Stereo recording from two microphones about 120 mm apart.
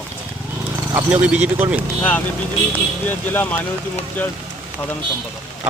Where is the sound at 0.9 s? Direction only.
15° right (ahead or behind).